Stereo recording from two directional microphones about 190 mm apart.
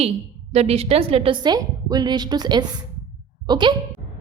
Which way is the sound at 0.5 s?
35° right (ahead or behind).